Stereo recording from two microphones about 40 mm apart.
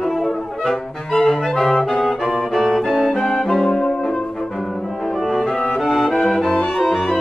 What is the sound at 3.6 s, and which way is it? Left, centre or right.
Brass instrument, centre.